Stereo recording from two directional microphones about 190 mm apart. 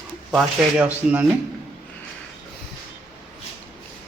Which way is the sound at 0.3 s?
5° right (ahead or behind).